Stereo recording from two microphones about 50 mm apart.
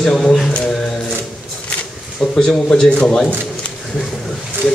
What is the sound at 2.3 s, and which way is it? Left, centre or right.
Speech, centre.